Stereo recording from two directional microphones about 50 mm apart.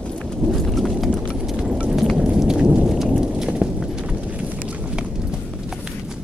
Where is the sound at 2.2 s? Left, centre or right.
Centre.